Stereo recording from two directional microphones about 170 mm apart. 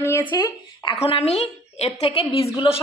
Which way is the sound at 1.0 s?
35° left (ahead or behind).